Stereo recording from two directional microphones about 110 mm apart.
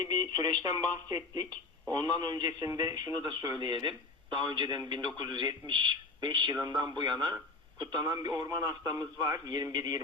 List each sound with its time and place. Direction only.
0.0 s a man's voice: 40° right (ahead or behind)